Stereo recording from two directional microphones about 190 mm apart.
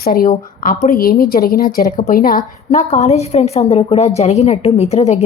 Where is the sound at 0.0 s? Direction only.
50° left (ahead or behind).